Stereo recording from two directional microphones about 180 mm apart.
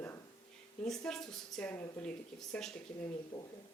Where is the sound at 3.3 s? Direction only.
20° left (ahead or behind).